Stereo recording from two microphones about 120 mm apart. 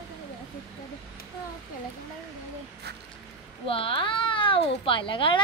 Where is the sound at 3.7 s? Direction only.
50° left (ahead or behind).